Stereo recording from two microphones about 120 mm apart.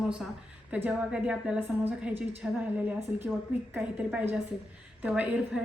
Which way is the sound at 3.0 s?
20° right (ahead or behind).